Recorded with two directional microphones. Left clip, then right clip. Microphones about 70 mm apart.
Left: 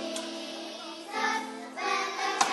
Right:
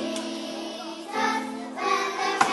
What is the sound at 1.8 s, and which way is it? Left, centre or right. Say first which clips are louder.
Music: right 5 dB; centre.